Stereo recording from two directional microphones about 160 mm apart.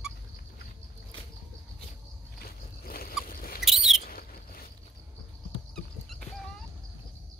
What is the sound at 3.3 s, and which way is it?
Rodents, 65° left (ahead or behind).